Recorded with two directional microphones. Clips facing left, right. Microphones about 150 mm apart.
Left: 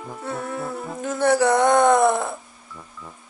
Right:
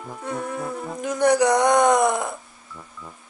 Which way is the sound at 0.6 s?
Centre (ahead or behind).